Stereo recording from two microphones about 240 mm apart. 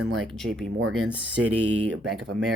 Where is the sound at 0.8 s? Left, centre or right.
Right.